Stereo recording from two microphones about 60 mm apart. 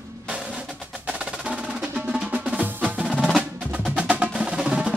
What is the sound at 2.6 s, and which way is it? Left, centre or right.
Music, right.